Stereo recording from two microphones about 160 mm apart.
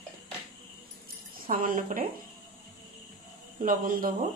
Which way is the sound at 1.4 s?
55° right (ahead or behind).